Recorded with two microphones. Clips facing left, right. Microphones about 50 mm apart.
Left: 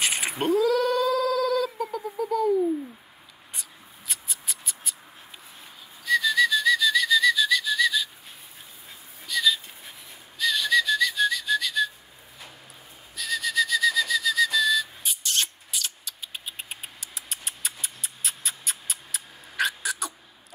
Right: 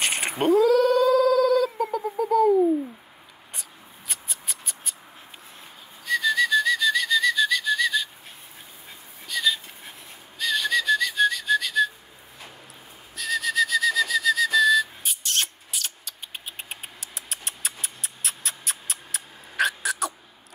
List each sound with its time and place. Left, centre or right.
0.0 s cat: centre
4.1 s a sound: centre
6.0 s whistling: centre
9.2 s a sound: centre
10.4 s whistling: centre
13.1 s whistling: centre